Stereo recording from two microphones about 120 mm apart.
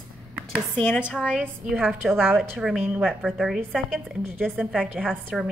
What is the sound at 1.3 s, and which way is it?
Speech, 5° right (ahead or behind).